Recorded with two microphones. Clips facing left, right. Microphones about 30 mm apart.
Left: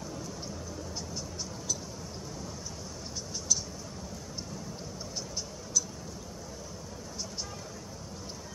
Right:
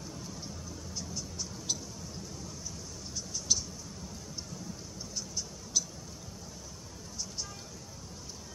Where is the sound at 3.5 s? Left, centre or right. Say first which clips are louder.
Even; right.